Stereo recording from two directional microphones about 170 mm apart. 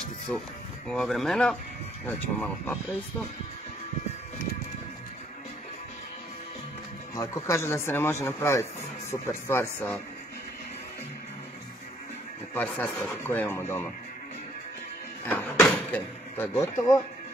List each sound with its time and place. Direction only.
0.3 s a man's voice: 10° left (ahead or behind)
7.2 s a man's voice: 20° left (ahead or behind)
12.5 s a man's voice: 5° left (ahead or behind)
15.2 s speech: 10° left (ahead or behind)